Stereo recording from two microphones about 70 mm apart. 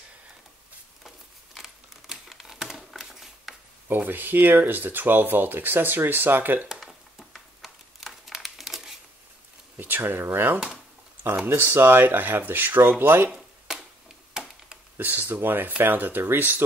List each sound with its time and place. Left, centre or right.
1.0 s crumpling: centre
3.9 s speech: right
6.7 s a sound: centre
9.8 s speech: right
13.3 s a sound: centre
14.3 s chop: centre
15.0 s speech: right